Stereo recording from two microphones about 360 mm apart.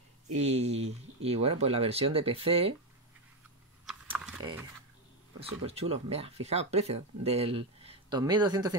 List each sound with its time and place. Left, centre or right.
0.4 s speech: centre
3.8 s a sound: centre
5.4 s speech: centre